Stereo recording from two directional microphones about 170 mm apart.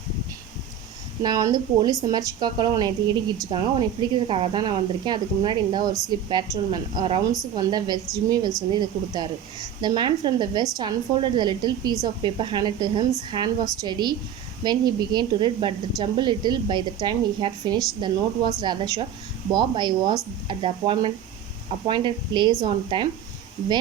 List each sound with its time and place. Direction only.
1.2 s speech: 20° right (ahead or behind)